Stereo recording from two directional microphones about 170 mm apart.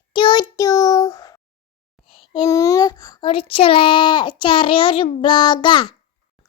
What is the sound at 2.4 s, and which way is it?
A child's voice, 20° left (ahead or behind).